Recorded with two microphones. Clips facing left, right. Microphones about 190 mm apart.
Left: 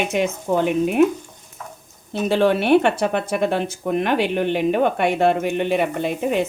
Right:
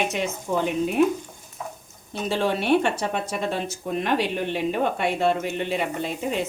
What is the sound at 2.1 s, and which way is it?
A woman's voice, 65° left (ahead or behind).